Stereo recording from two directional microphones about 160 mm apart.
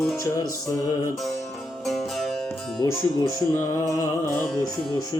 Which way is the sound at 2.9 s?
15° left (ahead or behind).